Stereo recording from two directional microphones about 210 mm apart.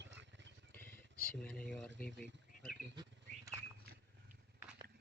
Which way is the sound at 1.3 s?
5° left (ahead or behind).